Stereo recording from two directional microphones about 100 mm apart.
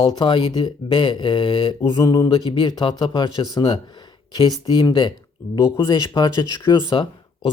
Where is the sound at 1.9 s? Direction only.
40° left (ahead or behind).